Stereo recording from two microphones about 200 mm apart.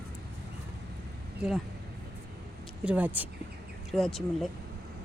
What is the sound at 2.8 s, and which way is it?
Speech, 5° right (ahead or behind).